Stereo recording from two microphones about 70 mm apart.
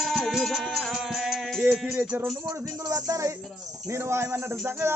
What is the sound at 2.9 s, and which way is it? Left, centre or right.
Speech, right.